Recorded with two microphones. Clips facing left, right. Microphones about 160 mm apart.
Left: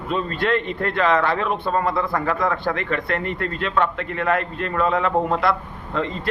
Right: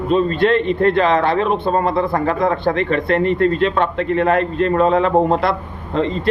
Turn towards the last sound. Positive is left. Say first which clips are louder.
# right 6 dB
turn(degrees=-25)  # may be behind; listen again after turning